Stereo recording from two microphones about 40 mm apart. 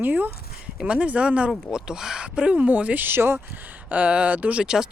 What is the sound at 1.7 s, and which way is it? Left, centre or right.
Speech, centre.